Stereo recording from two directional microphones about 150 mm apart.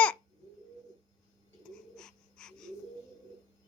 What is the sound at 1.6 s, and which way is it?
Bird, 5° left (ahead or behind).